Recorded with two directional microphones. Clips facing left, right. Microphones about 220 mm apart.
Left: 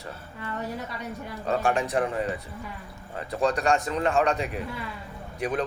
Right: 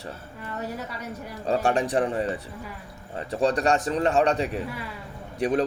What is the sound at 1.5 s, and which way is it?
A man's voice, 35° right (ahead or behind).